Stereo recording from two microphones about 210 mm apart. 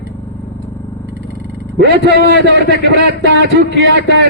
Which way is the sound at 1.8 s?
55° right (ahead or behind).